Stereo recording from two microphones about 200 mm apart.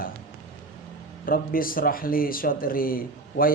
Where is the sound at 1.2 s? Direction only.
45° left (ahead or behind).